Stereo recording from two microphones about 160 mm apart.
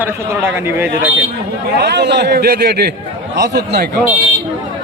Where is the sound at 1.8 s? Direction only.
90° right.